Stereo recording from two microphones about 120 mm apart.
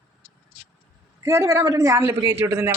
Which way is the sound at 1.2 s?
25° right (ahead or behind).